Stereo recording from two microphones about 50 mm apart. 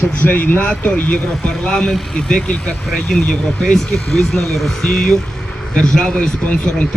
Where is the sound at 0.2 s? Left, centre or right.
Left.